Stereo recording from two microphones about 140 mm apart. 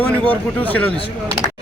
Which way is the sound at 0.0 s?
10° left (ahead or behind).